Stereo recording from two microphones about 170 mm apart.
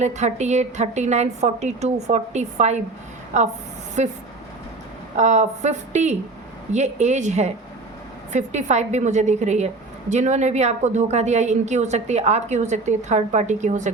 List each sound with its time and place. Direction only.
0.0 s a woman's voice: 40° right (ahead or behind)
5.1 s a woman's voice: 40° right (ahead or behind)